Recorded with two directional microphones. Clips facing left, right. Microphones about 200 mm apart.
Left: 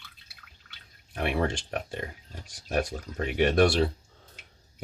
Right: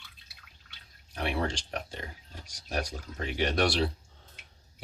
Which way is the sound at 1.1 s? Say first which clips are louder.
Left 3 dB; 55° left (ahead or behind).